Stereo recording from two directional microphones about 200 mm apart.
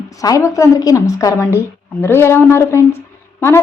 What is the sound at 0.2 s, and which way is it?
A woman's voice, 15° left (ahead or behind).